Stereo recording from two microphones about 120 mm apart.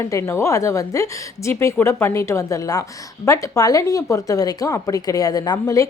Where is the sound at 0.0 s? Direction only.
25° left (ahead or behind).